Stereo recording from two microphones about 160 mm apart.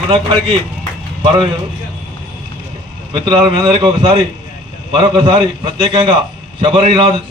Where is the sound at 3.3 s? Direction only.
35° right (ahead or behind).